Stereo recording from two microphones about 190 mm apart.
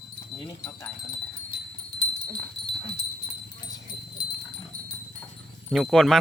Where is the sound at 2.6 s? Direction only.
65° left (ahead or behind).